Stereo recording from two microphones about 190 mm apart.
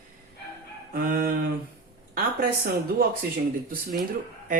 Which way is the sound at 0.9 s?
45° right (ahead or behind).